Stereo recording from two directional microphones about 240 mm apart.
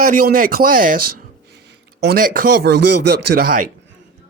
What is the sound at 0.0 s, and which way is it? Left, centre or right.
Speech, right.